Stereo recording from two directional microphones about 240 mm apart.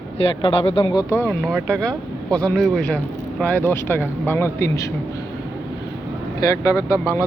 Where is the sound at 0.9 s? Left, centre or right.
Centre.